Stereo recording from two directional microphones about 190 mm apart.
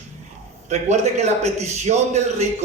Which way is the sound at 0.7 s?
35° right (ahead or behind).